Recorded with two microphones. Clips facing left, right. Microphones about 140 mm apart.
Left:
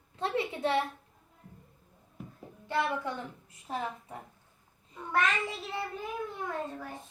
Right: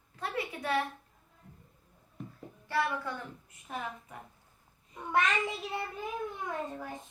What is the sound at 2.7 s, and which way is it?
A child's voice, 20° left (ahead or behind).